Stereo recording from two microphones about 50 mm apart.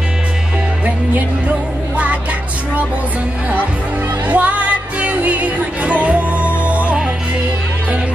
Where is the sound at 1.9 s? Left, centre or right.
Right.